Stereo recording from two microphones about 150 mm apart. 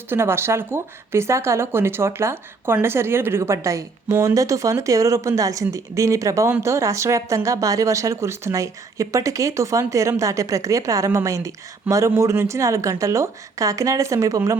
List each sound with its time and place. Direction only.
0.1 s speech: 15° right (ahead or behind)